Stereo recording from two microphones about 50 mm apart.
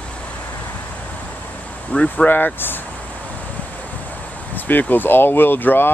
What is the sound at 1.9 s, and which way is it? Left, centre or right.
Speech, left.